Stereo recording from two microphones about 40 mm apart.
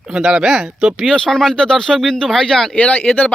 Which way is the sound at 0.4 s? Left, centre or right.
Centre.